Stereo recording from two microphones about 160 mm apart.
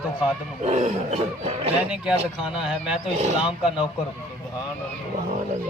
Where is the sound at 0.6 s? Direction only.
45° right (ahead or behind).